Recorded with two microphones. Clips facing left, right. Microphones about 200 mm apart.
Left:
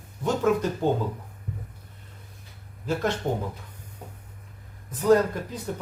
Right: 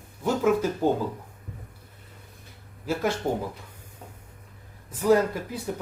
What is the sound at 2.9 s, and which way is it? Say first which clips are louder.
Speech: even; 10° right (ahead or behind).